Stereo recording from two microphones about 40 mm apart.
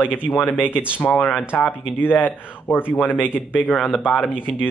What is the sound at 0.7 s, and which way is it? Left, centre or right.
Speech, left.